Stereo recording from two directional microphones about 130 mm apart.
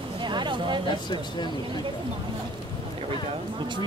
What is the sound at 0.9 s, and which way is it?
Speech, 35° left (ahead or behind).